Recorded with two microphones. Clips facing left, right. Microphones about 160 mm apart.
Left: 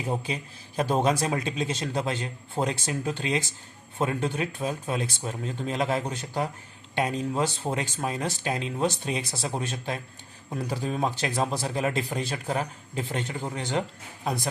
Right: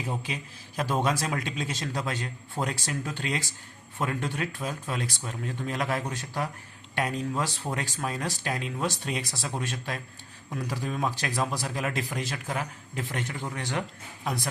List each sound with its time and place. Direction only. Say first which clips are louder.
0.8 s speech: left 3 dB; 25° left (ahead or behind)